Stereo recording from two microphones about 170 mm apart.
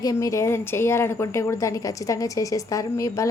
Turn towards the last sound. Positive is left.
turn(degrees=20)  # may be behind; listen again after turning